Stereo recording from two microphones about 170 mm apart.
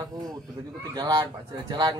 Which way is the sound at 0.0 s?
20° right (ahead or behind).